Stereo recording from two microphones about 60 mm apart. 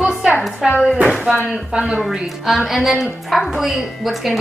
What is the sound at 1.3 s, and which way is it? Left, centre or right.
Speech, centre.